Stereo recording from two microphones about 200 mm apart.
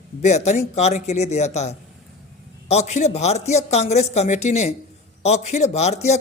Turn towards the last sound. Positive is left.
turn(degrees=35)  # may be behind; listen again after turning